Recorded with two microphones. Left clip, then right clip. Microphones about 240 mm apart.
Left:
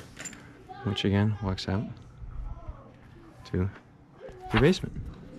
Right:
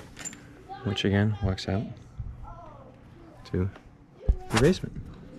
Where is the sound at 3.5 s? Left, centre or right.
Centre.